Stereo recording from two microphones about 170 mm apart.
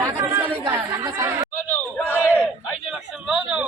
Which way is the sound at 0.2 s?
15° right (ahead or behind).